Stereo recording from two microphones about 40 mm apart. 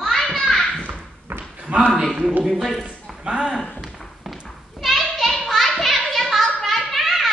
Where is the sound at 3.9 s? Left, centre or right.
Centre.